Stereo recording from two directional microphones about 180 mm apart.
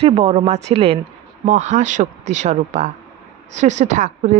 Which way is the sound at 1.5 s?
40° right (ahead or behind).